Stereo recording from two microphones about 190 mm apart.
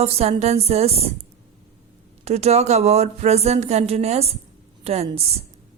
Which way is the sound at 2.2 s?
35° right (ahead or behind).